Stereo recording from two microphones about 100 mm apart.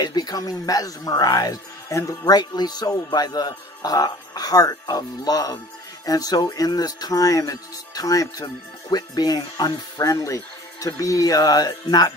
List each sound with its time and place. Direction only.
0.0 s speech: 45° left (ahead or behind)